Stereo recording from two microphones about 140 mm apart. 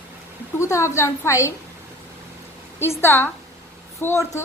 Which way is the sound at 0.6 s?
20° left (ahead or behind).